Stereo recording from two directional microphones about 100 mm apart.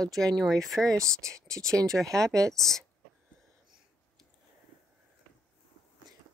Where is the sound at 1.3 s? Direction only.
30° right (ahead or behind).